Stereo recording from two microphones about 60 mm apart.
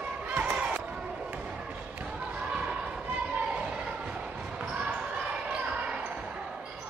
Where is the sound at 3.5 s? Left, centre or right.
Centre.